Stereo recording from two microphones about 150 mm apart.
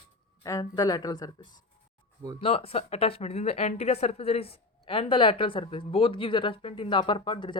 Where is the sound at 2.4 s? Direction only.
40° left (ahead or behind).